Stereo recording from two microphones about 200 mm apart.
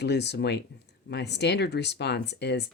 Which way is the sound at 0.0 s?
60° left (ahead or behind).